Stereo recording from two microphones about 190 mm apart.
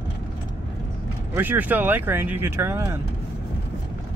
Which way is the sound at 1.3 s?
10° right (ahead or behind).